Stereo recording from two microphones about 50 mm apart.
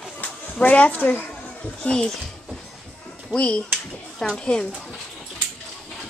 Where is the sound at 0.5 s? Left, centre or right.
Left.